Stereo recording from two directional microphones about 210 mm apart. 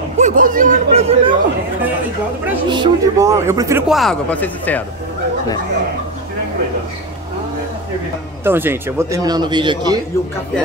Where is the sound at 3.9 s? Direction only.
Centre (ahead or behind).